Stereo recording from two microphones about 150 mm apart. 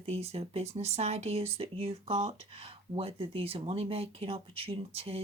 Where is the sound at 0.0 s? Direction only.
45° right (ahead or behind).